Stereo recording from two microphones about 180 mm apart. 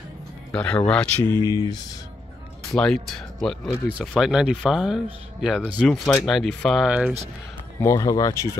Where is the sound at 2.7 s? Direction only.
5° left (ahead or behind).